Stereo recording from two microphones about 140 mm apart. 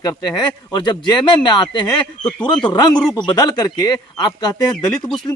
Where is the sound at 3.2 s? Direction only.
30° left (ahead or behind).